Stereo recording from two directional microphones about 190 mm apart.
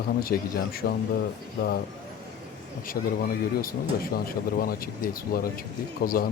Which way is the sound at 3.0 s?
45° left (ahead or behind).